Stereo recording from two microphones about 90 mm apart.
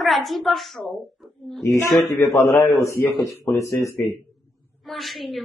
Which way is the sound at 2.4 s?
30° left (ahead or behind).